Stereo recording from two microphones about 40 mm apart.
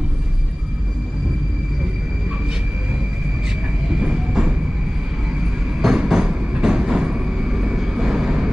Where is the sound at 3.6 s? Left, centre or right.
Right.